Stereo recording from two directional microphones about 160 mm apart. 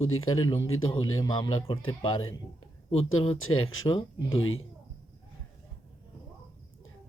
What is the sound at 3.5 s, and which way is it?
Speech, 30° left (ahead or behind).